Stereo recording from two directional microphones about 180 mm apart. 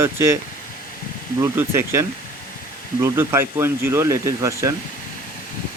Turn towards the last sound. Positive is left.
turn(degrees=-20)  # may be behind; listen again after turning